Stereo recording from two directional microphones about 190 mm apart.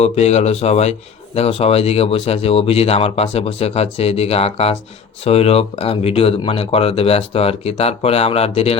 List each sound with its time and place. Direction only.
0.0 s speech: 35° left (ahead or behind)